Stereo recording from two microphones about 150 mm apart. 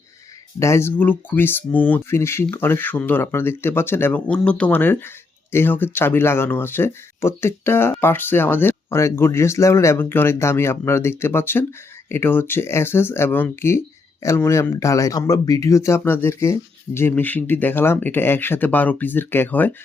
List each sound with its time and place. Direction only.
0.6 s speech: 15° left (ahead or behind)